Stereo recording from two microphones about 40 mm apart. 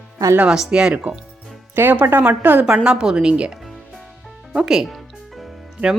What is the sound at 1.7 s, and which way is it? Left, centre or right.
Speech, right.